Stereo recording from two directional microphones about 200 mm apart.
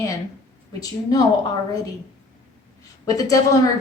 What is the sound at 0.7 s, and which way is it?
Speech, 20° left (ahead or behind).